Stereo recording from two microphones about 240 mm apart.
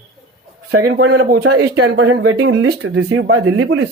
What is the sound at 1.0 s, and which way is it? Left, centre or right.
Speech, right.